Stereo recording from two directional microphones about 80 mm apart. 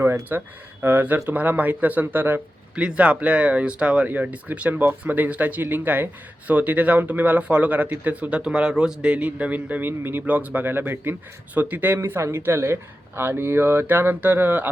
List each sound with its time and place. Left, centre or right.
0.0 s speech: right